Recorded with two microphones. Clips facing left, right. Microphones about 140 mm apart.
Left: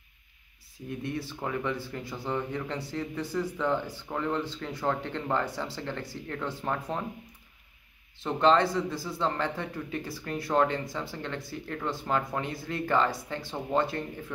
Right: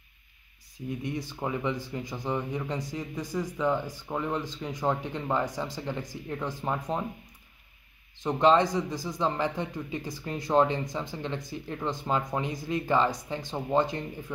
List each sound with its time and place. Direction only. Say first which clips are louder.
1.0 s speech: even; 15° right (ahead or behind)
8.2 s speech: right 1 dB; 15° right (ahead or behind)